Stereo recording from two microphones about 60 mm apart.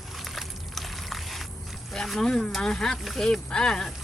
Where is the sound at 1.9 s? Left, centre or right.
Centre.